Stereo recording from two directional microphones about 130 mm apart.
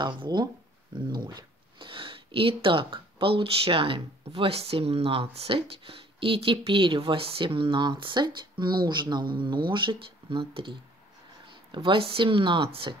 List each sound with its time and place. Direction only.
0.0 s a woman's voice: 35° right (ahead or behind)